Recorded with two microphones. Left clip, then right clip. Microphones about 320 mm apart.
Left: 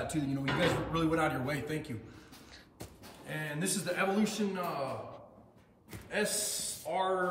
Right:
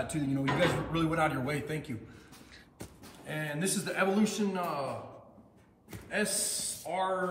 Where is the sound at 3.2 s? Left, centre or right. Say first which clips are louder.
Right 2 dB; centre.